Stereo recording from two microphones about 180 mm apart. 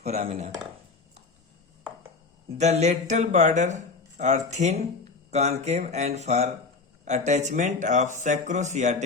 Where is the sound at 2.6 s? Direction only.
40° right (ahead or behind).